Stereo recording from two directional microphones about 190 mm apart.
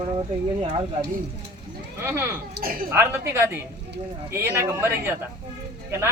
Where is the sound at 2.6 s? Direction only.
50° right (ahead or behind).